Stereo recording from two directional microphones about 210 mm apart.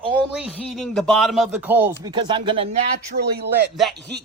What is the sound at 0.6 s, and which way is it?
Speech, centre (ahead or behind).